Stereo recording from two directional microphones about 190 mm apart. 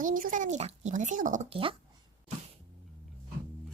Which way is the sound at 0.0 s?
45° right (ahead or behind).